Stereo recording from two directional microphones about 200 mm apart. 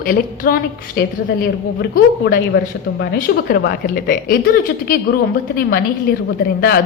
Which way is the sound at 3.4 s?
50° left (ahead or behind).